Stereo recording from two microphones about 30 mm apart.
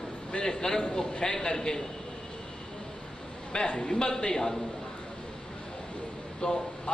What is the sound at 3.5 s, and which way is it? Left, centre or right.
A man's voice, left.